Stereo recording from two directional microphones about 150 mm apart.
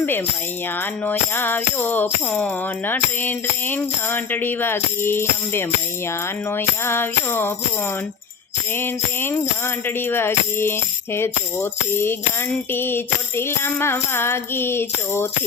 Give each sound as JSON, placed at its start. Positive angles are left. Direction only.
{"t": 1.0, "sound": "music", "side_deg": 15}
{"t": 8.7, "sound": "music", "side_deg": 15}